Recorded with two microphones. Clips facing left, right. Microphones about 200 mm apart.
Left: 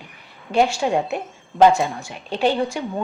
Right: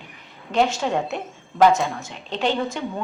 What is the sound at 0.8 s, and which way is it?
A woman's voice, 15° left (ahead or behind).